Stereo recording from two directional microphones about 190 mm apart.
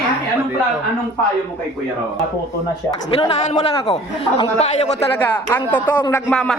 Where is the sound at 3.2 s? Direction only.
25° left (ahead or behind).